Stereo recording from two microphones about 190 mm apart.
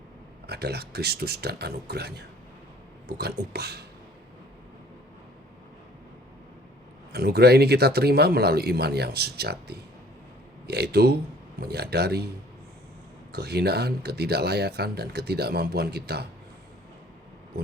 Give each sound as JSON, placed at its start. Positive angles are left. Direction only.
{"t": 0.4, "sound": "speech", "side_deg": -60}
{"t": 7.1, "sound": "speech", "side_deg": -55}
{"t": 13.3, "sound": "speech", "side_deg": -60}